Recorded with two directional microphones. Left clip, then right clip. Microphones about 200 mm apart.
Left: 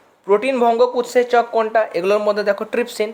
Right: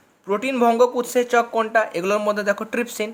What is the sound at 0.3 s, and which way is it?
Speech, 10° right (ahead or behind).